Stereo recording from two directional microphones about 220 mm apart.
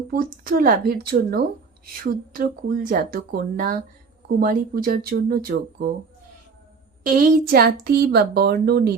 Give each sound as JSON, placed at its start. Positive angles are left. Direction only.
{"t": 0.1, "sound": "speech", "side_deg": -40}
{"t": 7.0, "sound": "speech", "side_deg": -40}